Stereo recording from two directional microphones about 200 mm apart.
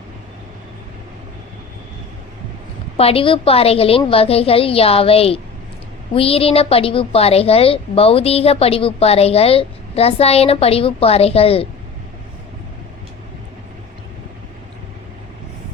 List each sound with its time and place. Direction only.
3.0 s a woman's voice: 30° left (ahead or behind)